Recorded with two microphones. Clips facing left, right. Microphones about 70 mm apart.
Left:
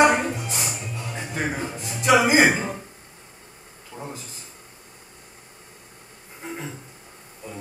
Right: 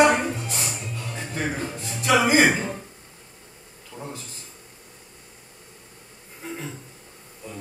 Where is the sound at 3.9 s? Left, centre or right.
Centre.